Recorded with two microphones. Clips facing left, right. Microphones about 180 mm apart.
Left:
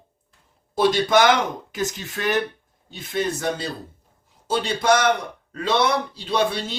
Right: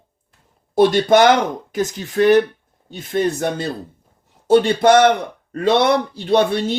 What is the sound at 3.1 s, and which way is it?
Speech, 50° right (ahead or behind).